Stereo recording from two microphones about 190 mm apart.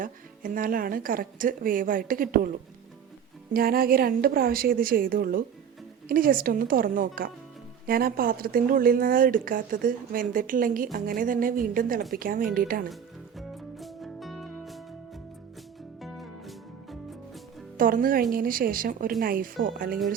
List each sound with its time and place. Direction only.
0.0 s speech: 45° right (ahead or behind)
12.9 s music: centre (ahead or behind)
16.0 s music: centre (ahead or behind)
17.7 s speech: 45° right (ahead or behind)